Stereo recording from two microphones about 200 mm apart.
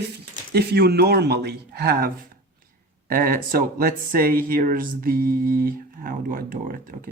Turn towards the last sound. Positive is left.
turn(degrees=-45)  # may be behind; listen again after turning